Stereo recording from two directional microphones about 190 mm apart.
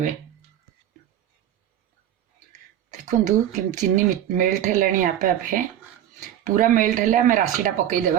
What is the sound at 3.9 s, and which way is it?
Speech, 45° right (ahead or behind).